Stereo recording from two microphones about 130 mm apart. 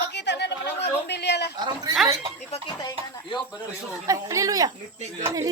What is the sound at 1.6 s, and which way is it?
Speech, 35° right (ahead or behind).